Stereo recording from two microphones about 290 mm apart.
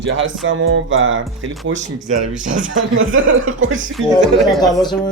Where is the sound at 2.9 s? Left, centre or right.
Right.